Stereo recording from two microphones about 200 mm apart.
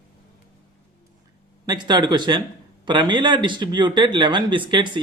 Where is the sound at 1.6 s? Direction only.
20° right (ahead or behind).